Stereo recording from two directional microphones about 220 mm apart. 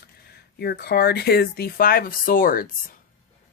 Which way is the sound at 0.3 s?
45° left (ahead or behind).